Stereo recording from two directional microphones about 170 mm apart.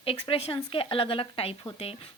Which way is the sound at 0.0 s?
35° left (ahead or behind).